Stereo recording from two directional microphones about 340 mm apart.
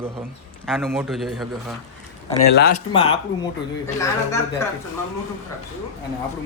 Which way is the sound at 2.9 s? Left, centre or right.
Centre.